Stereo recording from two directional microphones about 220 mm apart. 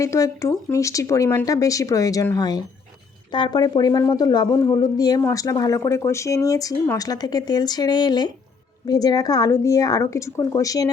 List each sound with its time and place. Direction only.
0.0 s speech: 15° left (ahead or behind)